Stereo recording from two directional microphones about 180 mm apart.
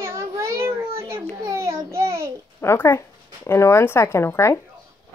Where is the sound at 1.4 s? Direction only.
15° right (ahead or behind).